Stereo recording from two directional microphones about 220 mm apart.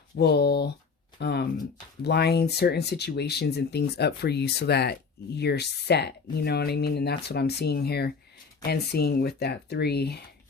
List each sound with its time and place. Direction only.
0.2 s speech: 50° left (ahead or behind)